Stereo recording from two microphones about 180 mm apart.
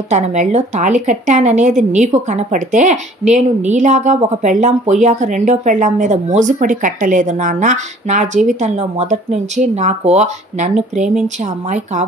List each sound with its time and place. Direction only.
0.1 s a woman's voice: 40° right (ahead or behind)